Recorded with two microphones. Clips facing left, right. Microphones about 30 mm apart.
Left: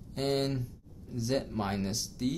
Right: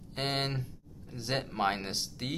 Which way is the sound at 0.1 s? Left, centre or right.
Right.